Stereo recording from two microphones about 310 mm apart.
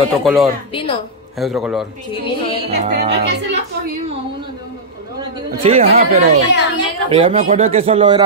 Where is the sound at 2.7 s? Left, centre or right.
Right.